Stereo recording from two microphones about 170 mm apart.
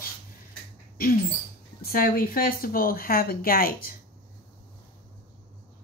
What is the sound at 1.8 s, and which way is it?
Speech, 55° left (ahead or behind).